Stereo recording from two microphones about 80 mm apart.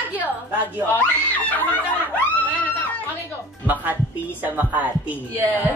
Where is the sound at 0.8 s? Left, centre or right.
Left.